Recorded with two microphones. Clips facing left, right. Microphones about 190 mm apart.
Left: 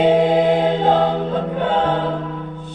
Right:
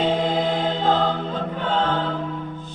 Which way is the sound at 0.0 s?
60° left (ahead or behind).